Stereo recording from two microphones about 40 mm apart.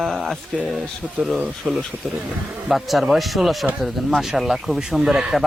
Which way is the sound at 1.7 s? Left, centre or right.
Right.